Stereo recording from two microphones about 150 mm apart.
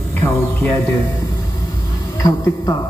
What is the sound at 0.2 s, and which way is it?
Speech, 10° left (ahead or behind).